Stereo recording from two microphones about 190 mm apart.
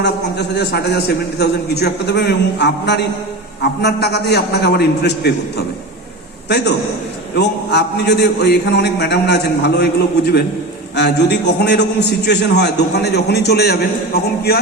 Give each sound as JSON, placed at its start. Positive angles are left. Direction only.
{"t": 0.0, "sound": "a man's voice", "side_deg": 60}
{"t": 7.3, "sound": "a man's voice", "side_deg": 60}
{"t": 10.9, "sound": "a man's voice", "side_deg": 60}